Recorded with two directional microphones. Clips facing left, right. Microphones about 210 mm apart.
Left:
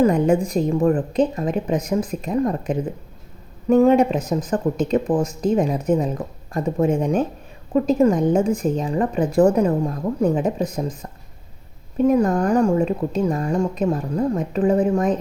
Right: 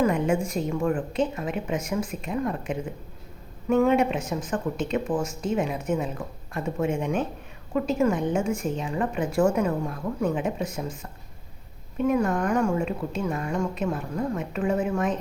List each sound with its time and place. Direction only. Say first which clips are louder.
0.0 s a woman's voice: left 6 dB; 35° left (ahead or behind)